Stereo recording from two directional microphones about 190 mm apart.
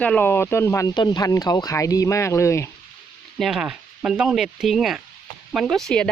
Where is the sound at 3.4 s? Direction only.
5° right (ahead or behind).